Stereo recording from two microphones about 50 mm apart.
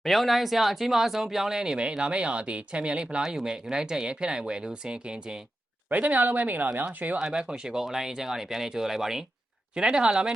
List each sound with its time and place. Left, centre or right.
0.0 s speech: centre
1.8 s speech: right
5.9 s speech: right
7.3 s speech: centre